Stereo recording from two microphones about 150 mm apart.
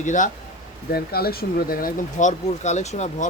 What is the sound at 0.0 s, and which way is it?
Speech, 55° left (ahead or behind).